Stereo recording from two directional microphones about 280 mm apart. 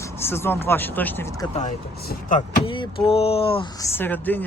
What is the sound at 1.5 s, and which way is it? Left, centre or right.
Speech, left.